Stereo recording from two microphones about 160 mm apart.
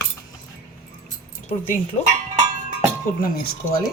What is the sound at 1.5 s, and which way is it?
Speech, 55° left (ahead or behind).